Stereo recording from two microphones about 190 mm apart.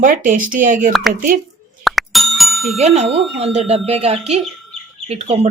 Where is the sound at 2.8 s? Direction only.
35° right (ahead or behind).